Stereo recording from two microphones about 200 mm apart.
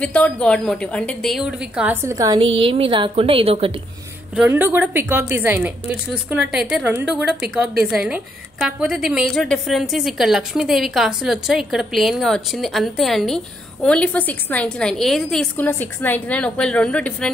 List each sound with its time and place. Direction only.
0.0 s a woman's voice: 5° left (ahead or behind); by 3.7 s 30° right (ahead or behind)
4.4 s a woman's voice: 10° right (ahead or behind)